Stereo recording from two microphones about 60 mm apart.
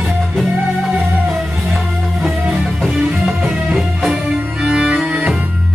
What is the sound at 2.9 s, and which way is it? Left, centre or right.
Music, centre.